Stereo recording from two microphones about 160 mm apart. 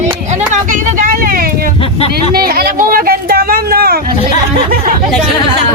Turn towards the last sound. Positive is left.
turn(degrees=-70)  # may be behind; listen again after turning